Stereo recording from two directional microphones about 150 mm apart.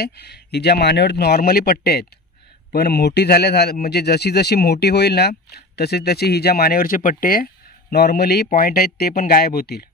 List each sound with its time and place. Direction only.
0.0 s speech: 90° left; by 7.4 s 70° left (ahead or behind)
7.9 s speech: 90° left